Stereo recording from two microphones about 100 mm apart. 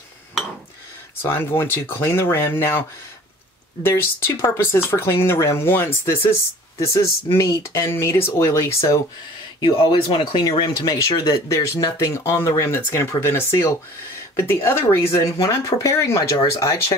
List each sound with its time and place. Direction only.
1.3 s speech: 25° left (ahead or behind)
3.8 s speech: 25° left (ahead or behind)
9.6 s speech: 50° left (ahead or behind)
10.6 s speech: 40° left (ahead or behind)